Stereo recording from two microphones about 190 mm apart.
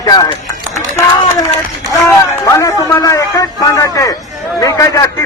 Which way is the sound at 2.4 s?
15° left (ahead or behind).